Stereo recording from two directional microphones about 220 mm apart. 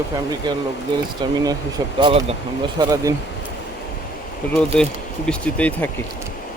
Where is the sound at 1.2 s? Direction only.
20° right (ahead or behind).